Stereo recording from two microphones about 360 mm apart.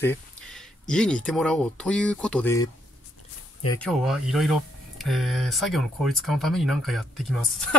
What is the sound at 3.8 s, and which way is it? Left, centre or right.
Speech, centre.